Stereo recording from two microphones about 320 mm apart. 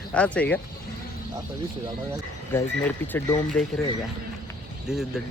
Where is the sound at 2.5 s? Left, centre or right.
Centre.